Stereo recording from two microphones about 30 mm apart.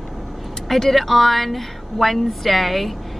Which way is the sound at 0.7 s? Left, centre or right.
Centre.